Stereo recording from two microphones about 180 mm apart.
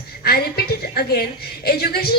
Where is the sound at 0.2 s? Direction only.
60° left (ahead or behind).